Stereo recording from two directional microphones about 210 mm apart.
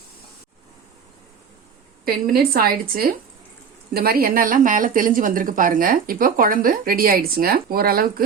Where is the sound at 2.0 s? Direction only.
45° right (ahead or behind).